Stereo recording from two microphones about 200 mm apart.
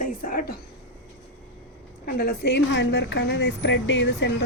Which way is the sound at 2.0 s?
50° left (ahead or behind).